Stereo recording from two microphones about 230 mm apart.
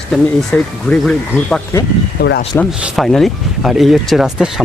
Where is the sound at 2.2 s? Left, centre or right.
Left.